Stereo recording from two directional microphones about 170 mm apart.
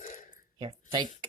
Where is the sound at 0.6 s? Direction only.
25° right (ahead or behind).